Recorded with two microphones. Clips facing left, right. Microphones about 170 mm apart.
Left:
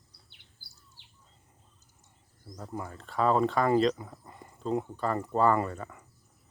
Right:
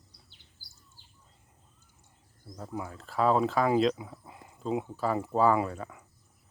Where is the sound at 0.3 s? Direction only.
65° left (ahead or behind).